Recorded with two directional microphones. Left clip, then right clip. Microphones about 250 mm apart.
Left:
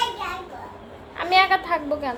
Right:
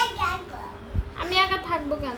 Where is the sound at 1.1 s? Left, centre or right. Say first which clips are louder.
Left 5 dB; centre.